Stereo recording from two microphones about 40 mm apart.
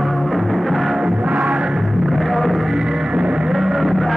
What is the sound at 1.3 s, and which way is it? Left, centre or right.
Music, centre.